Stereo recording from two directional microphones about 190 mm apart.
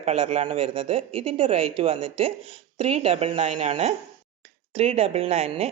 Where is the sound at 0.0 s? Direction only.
35° right (ahead or behind).